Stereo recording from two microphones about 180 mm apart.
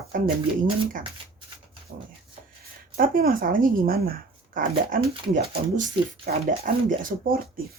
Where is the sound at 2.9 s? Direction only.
50° right (ahead or behind).